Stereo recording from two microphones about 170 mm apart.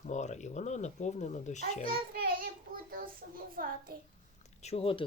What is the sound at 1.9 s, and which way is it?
A child's voice, 60° right (ahead or behind).